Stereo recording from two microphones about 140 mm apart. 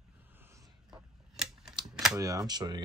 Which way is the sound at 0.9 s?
5° right (ahead or behind).